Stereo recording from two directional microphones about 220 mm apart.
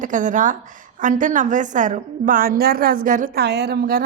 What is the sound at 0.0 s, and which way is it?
A woman's voice, 35° right (ahead or behind).